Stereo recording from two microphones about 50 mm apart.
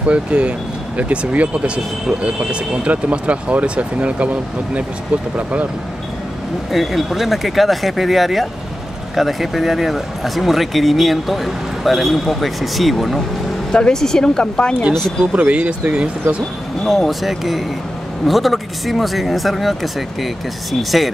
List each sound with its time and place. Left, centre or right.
0.0 s speech: right
6.7 s speech: centre
13.7 s speech: centre
15.3 s speech: right
16.8 s speech: centre